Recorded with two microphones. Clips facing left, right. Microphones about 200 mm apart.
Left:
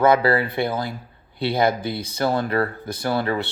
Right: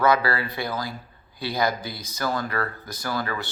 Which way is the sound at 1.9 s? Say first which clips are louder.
Left 10 dB; 60° left (ahead or behind).